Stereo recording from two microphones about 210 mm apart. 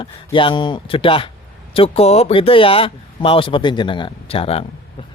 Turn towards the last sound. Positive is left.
turn(degrees=25)  # may be behind; listen again after turning